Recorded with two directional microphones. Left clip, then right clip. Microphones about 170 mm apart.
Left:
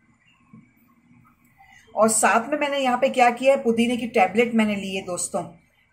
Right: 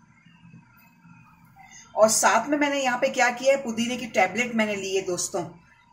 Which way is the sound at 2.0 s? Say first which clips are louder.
Even; 15° left (ahead or behind).